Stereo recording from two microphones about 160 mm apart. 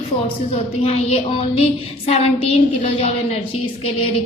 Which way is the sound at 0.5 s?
40° left (ahead or behind).